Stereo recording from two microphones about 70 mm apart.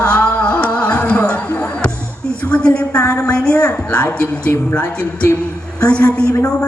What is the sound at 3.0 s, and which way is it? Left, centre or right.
Speech, left.